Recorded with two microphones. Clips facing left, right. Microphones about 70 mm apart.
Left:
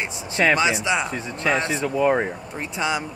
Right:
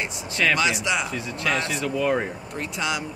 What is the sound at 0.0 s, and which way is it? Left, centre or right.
Speech, left.